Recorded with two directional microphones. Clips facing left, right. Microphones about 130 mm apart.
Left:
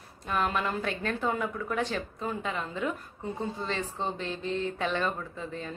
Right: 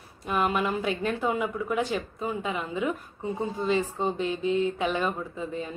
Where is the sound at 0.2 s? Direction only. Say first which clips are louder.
Right 3 dB; 20° right (ahead or behind).